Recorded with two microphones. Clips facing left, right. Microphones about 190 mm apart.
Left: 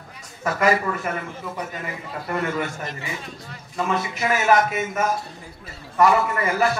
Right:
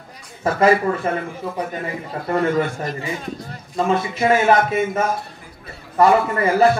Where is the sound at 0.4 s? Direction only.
30° right (ahead or behind).